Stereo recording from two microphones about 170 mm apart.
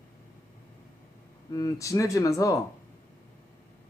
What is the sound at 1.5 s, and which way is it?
Speech, 20° left (ahead or behind).